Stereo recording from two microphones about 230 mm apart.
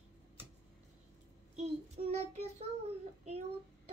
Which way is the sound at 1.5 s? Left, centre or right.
Right.